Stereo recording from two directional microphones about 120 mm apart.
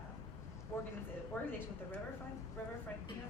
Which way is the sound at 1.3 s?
15° left (ahead or behind).